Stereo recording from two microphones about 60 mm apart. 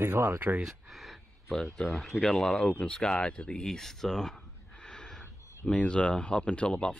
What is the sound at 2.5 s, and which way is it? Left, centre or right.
Speech, centre.